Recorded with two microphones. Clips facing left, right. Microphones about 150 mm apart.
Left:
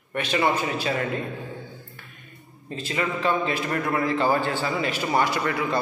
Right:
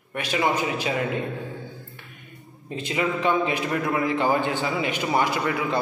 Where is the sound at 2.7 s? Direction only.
15° right (ahead or behind).